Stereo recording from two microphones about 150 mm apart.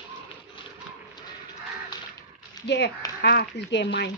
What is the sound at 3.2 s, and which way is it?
Speech, 85° left.